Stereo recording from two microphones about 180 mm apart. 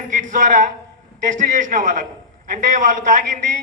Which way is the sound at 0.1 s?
45° right (ahead or behind).